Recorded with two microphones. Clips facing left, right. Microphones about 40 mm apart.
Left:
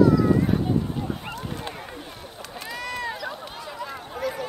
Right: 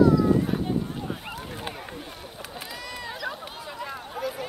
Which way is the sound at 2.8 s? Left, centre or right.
Centre.